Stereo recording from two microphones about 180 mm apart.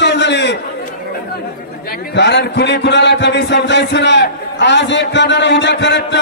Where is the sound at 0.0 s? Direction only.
75° left (ahead or behind).